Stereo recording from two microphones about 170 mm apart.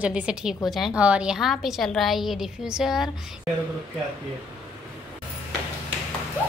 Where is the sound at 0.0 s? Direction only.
5° right (ahead or behind).